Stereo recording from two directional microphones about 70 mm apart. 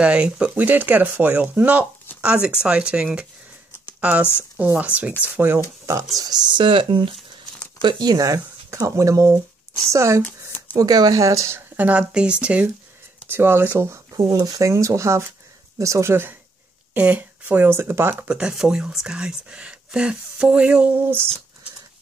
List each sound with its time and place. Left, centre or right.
0.0 s speech: centre
6.1 s speech: right
7.8 s speech: right
10.8 s speech: right
11.7 s speech: right
12.1 s speech: centre
13.3 s speech: right
14.1 s speech: right
16.9 s speech: centre; by 18.1 s right
18.2 s speech: centre
21.0 s speech: right